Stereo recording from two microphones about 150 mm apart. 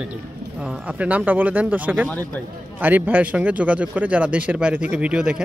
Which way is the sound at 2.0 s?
10° left (ahead or behind).